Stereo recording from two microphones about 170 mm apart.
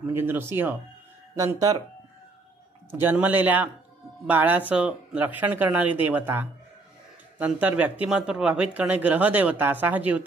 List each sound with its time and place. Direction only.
0.1 s speech: 15° right (ahead or behind)
2.9 s speech: 10° right (ahead or behind)